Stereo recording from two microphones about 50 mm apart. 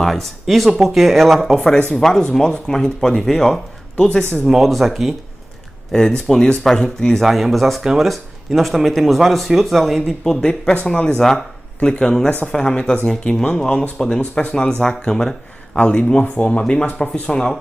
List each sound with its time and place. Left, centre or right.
0.0 s speech: centre
1.8 s speech: centre
4.5 s speech: centre
5.9 s speech: centre
7.2 s speech: centre
7.8 s speech: centre
12.3 s speech: left
12.5 s speech: centre
15.8 s speech: left